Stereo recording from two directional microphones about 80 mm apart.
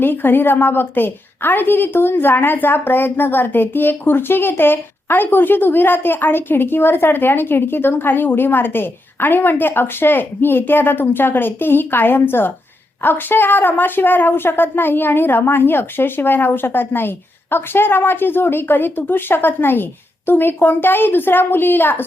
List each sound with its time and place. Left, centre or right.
0.0 s a woman's voice: left